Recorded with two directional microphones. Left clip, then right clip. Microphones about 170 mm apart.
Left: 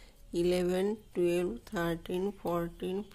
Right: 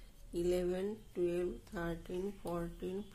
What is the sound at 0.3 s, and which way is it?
Speech, 45° left (ahead or behind).